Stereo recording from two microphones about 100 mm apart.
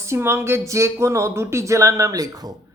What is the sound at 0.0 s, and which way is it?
Speech, 25° right (ahead or behind).